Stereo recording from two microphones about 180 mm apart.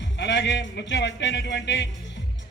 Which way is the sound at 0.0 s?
75° left (ahead or behind).